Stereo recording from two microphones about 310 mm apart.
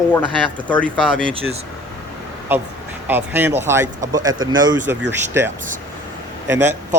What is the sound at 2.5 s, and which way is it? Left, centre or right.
Speech, centre.